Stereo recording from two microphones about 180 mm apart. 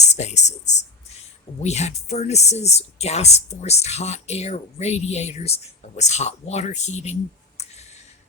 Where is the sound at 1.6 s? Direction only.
40° left (ahead or behind).